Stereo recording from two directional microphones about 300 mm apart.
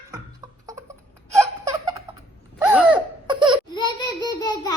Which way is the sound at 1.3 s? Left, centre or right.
Centre.